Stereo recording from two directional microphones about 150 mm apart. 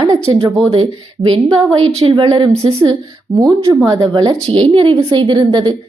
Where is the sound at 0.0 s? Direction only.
35° right (ahead or behind).